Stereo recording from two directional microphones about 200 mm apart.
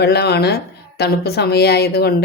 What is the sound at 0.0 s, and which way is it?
Speech, 55° left (ahead or behind).